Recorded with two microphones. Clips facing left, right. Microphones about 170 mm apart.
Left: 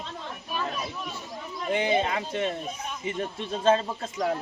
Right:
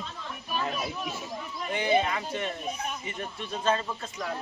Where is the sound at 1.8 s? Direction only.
25° left (ahead or behind).